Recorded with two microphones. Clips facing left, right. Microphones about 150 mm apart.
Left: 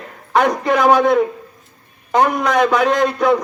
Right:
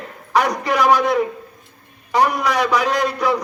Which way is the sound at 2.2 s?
50° left (ahead or behind).